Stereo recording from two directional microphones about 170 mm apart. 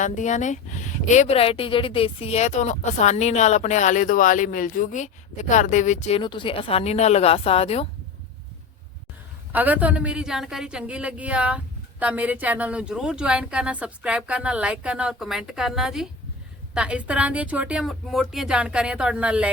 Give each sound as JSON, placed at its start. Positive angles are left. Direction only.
{"t": 0.0, "sound": "speech", "side_deg": 45}
{"t": 9.5, "sound": "a woman's voice", "side_deg": -10}